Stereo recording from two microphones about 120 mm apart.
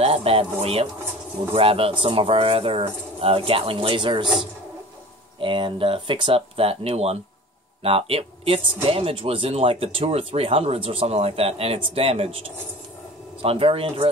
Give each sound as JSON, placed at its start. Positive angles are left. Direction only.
{"t": 0.0, "sound": "speech", "side_deg": -55}
{"t": 5.4, "sound": "speech", "side_deg": -45}